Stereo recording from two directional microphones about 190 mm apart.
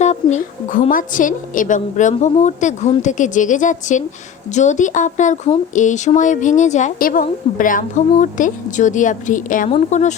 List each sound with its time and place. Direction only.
0.0 s a woman's voice: 40° left (ahead or behind)